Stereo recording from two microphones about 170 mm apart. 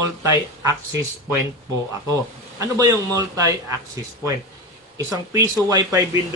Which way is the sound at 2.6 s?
20° right (ahead or behind).